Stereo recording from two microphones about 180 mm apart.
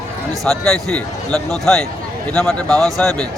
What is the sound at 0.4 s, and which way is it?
Speech, centre (ahead or behind).